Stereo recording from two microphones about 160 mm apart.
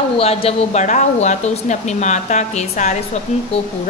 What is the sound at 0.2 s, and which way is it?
Speech, 40° left (ahead or behind).